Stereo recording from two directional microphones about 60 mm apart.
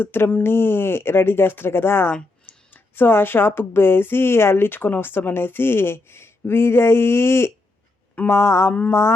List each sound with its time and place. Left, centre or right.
0.0 s speech: left
8.3 s mantra: left